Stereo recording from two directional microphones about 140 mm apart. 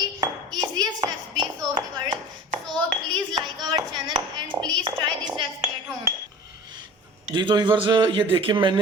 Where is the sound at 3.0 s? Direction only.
30° right (ahead or behind).